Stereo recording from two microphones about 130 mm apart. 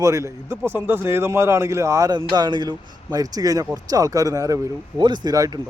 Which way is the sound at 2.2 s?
35° right (ahead or behind).